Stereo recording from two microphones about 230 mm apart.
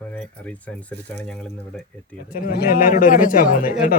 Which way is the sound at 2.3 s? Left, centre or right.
Left.